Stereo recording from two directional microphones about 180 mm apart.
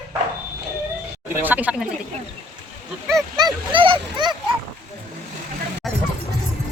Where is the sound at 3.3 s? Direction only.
25° right (ahead or behind).